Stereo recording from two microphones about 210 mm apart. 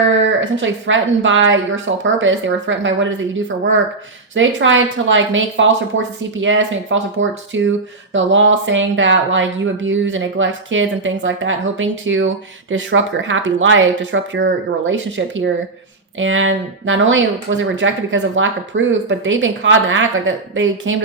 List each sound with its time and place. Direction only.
0.3 s speech: 65° right (ahead or behind)
4.4 s speech: 65° right (ahead or behind)